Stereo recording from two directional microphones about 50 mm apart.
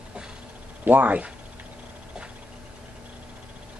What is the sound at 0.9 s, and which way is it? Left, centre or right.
Speech, right.